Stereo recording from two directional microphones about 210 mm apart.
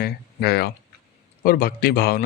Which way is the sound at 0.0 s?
50° left (ahead or behind).